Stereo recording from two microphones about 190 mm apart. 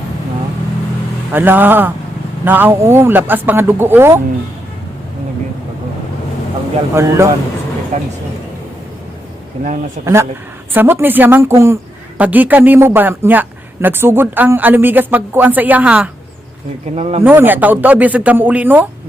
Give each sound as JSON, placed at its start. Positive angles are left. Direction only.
{"t": 1.3, "sound": "a woman's voice", "side_deg": -10}
{"t": 6.9, "sound": "a woman's voice", "side_deg": -15}
{"t": 7.9, "sound": "speech", "side_deg": -40}
{"t": 10.8, "sound": "a woman's voice", "side_deg": -10}
{"t": 16.9, "sound": "speech", "side_deg": -35}
{"t": 17.2, "sound": "a woman's voice", "side_deg": -10}